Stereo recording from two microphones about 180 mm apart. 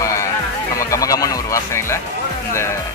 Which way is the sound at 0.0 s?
15° left (ahead or behind).